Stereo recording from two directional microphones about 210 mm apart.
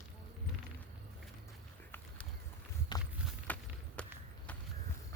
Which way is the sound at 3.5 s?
10° left (ahead or behind).